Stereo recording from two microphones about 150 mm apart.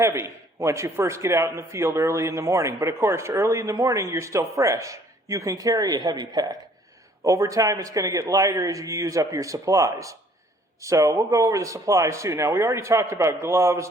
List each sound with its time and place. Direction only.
0.0 s a man's voice: 20° right (ahead or behind)